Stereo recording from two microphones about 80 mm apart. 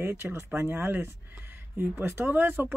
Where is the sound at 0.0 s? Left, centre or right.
Right.